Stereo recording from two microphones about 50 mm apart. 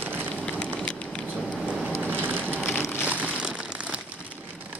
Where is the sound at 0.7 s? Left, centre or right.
Left.